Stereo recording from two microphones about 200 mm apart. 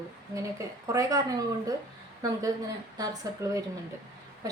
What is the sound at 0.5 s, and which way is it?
A woman's voice, 15° right (ahead or behind).